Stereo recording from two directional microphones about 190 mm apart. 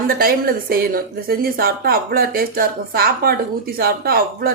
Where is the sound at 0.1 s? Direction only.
50° right (ahead or behind).